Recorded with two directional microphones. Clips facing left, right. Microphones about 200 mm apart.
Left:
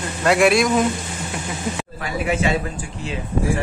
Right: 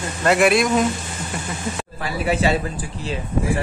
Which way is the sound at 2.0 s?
35° right (ahead or behind).